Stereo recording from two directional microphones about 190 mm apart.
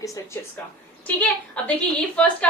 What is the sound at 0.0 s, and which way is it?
Speech, 15° left (ahead or behind).